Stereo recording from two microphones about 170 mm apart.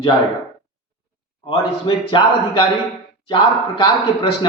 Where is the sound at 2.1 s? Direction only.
30° left (ahead or behind).